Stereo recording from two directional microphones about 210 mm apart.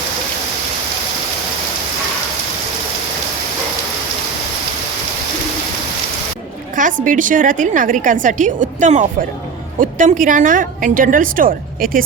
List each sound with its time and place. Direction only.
7.0 s a woman's voice: 40° right (ahead or behind)